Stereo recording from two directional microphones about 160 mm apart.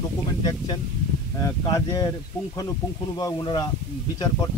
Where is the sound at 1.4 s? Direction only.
20° left (ahead or behind).